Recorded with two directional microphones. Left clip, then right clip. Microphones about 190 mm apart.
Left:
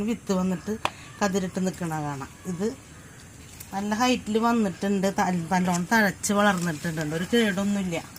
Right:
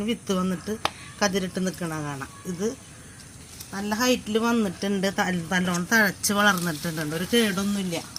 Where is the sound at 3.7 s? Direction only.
35° left (ahead or behind).